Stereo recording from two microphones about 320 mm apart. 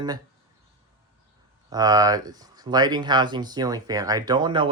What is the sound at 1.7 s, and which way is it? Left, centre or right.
Speech, centre.